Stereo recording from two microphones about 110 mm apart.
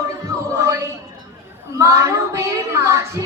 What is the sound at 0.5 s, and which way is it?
Child singing, 25° right (ahead or behind).